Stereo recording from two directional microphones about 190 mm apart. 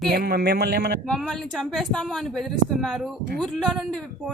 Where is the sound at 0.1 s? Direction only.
55° right (ahead or behind).